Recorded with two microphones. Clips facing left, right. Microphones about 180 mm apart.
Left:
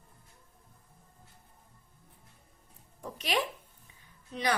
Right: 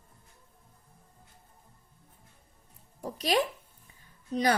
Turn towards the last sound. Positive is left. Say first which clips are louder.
# right 8 dB
turn(degrees=-40)  # may be behind; listen again after turning